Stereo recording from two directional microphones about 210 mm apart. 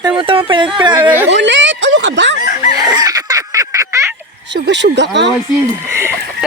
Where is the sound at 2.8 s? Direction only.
20° right (ahead or behind).